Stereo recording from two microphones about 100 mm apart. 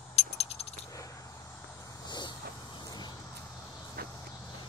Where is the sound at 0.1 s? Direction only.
90° left.